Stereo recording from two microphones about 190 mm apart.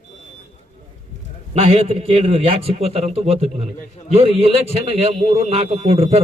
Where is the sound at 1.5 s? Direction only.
30° right (ahead or behind).